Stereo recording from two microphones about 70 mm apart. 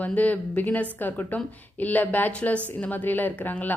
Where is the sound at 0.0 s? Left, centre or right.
Left.